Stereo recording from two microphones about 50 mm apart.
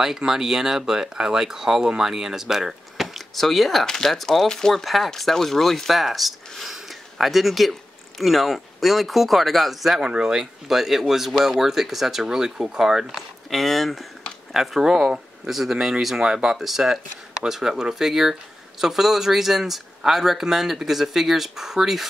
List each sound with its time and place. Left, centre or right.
0.0 s speech: centre
9.9 s speech: centre
13.5 s speech: centre